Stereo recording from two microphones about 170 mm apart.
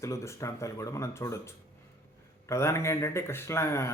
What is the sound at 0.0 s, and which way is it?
Speech, 15° left (ahead or behind).